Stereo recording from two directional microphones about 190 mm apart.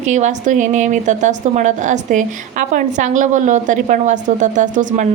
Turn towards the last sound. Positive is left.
turn(degrees=-40)  # may be behind; listen again after turning